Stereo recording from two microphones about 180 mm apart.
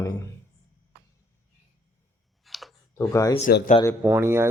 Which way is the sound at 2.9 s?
15° left (ahead or behind).